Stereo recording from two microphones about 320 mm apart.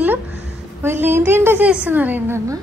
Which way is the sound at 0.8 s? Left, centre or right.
Centre.